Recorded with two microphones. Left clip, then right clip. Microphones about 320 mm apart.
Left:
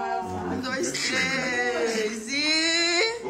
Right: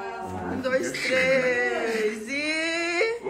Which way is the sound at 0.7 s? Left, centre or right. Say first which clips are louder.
Right 4 dB; centre.